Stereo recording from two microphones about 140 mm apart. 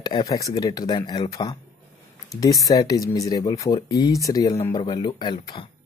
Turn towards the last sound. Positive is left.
turn(degrees=35)  # may be behind; listen again after turning